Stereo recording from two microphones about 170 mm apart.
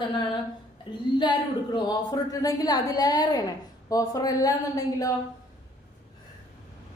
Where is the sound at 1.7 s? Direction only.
20° left (ahead or behind).